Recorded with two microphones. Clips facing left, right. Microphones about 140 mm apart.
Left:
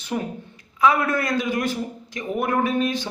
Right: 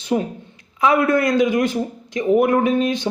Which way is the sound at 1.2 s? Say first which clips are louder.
Right 7 dB; 20° right (ahead or behind).